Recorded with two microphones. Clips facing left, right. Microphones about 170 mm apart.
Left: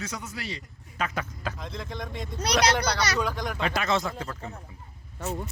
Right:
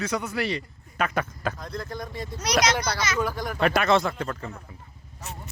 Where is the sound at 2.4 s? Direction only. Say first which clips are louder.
Even; 30° left (ahead or behind).